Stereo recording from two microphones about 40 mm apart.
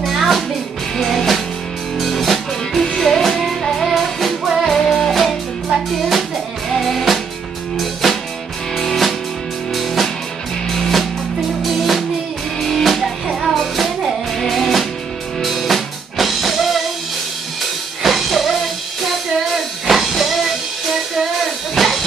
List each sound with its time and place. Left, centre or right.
0.0 s music: centre
11.6 s music: centre
18.0 s music: centre
21.7 s music: centre